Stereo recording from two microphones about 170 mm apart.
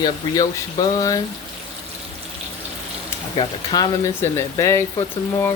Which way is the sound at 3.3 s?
30° left (ahead or behind).